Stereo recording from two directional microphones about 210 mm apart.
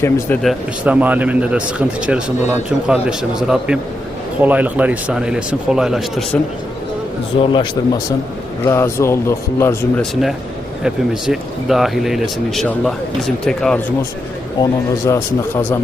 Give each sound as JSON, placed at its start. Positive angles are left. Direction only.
{"t": 0.0, "sound": "speech", "side_deg": 10}
{"t": 0.9, "sound": "speech", "side_deg": -5}
{"t": 7.5, "sound": "a man's voice", "side_deg": 20}
{"t": 10.8, "sound": "speech", "side_deg": 0}
{"t": 14.6, "sound": "speech", "side_deg": 15}